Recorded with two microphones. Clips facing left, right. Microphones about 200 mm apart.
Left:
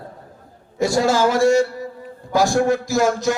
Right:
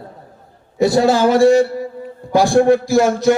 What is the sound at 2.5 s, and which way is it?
Speech, 30° right (ahead or behind).